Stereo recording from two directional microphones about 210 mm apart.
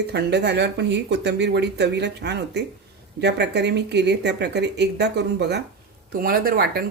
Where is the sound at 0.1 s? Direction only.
55° right (ahead or behind).